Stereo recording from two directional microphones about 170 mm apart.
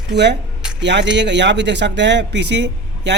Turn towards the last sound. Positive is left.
turn(degrees=-90)